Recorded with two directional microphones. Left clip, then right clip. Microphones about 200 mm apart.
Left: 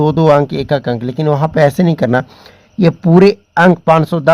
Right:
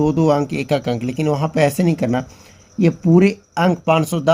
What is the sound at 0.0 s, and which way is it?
Speech, 45° left (ahead or behind).